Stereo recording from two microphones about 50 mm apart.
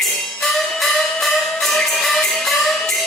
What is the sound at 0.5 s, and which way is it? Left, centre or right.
Music, centre.